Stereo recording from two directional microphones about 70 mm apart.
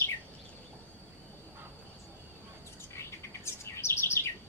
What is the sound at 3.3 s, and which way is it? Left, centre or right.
Bird, left.